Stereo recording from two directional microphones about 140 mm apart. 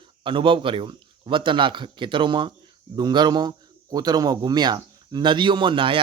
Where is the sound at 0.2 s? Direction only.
35° right (ahead or behind).